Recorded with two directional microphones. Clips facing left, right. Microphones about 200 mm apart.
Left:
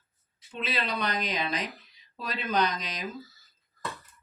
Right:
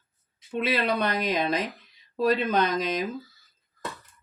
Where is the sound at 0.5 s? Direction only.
55° right (ahead or behind).